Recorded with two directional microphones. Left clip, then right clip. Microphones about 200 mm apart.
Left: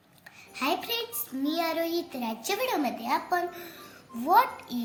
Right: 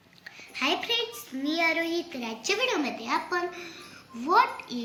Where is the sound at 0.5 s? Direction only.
50° left (ahead or behind).